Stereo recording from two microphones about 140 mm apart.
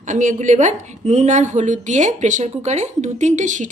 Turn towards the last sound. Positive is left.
turn(degrees=-60)  # may be behind; listen again after turning